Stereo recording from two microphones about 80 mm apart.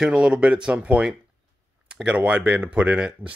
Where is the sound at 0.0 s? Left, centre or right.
Centre.